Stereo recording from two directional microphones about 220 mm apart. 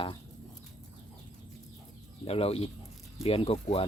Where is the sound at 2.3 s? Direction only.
25° left (ahead or behind).